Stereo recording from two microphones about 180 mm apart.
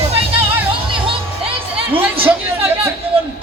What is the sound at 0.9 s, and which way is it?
Music, 30° right (ahead or behind).